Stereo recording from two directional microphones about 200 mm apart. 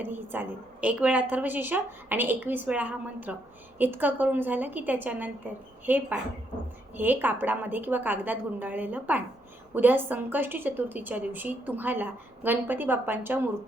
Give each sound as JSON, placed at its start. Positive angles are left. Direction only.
{"t": 0.0, "sound": "a woman's voice", "side_deg": -10}